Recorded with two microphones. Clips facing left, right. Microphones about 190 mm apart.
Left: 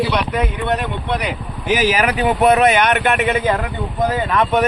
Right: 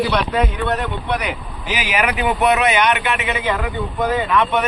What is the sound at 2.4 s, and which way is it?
Speech, 50° left (ahead or behind).